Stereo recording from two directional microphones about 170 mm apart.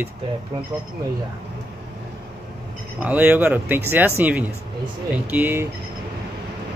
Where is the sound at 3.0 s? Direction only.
10° right (ahead or behind).